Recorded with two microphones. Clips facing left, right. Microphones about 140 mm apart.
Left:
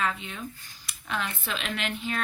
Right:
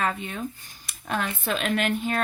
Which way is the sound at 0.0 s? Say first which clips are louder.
Right 3 dB; 50° right (ahead or behind).